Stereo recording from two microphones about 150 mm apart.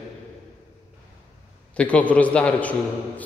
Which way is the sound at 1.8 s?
10° left (ahead or behind).